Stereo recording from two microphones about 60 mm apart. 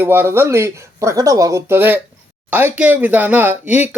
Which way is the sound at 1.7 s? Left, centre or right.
Right.